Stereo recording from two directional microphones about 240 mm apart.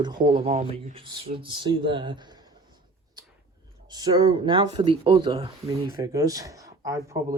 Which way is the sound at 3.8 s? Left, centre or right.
Centre.